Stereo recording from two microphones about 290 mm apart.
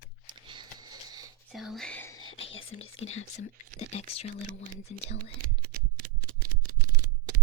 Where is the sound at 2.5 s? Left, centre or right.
Left.